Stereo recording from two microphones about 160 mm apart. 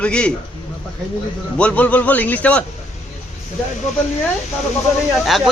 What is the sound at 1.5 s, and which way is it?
A man's voice, 10° left (ahead or behind).